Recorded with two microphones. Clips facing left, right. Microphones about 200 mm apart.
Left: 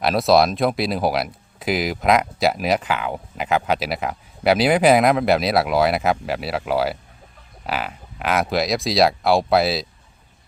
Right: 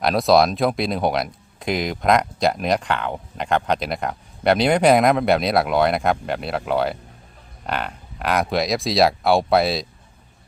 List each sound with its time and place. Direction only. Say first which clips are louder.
0.0 s speech: even; centre (ahead or behind)